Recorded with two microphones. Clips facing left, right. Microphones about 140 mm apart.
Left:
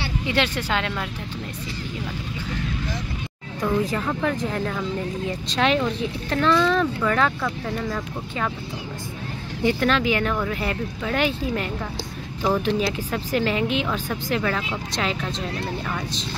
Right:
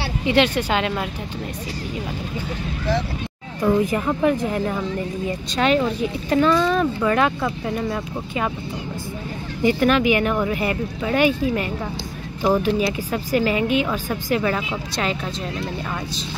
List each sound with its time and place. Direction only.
0.4 s speech: 15° right (ahead or behind)
3.6 s speech: 15° right (ahead or behind)
5.6 s speech: 5° right (ahead or behind)
9.6 s speech: 10° right (ahead or behind)